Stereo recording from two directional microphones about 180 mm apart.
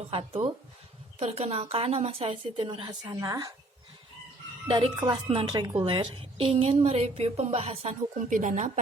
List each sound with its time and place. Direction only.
0.0 s a woman's voice: 35° right (ahead or behind)
4.7 s a woman's voice: 20° right (ahead or behind); by 8.8 s 40° right (ahead or behind)